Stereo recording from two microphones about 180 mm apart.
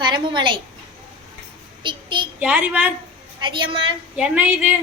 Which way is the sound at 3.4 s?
25° right (ahead or behind).